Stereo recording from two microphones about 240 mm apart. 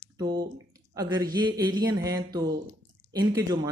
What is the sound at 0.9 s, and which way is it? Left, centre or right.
Speech, centre.